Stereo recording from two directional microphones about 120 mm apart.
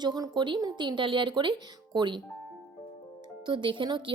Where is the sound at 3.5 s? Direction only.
40° right (ahead or behind).